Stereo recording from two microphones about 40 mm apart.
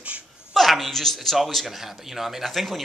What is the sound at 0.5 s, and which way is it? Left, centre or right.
Speech, centre.